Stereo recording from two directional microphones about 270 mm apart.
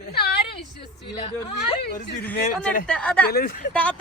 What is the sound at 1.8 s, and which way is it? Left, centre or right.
Speech, left.